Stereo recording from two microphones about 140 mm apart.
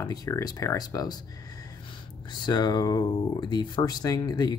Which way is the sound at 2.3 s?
30° left (ahead or behind).